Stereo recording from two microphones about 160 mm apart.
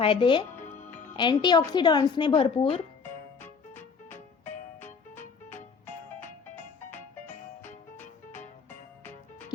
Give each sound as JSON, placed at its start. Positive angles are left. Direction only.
{"t": 0.0, "sound": "a woman's voice", "side_deg": 30}
{"t": 3.0, "sound": "music", "side_deg": 15}